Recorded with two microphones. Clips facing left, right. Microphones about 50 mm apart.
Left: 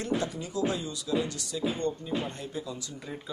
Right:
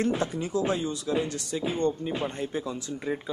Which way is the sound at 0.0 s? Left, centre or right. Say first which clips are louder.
Right 4 dB; right.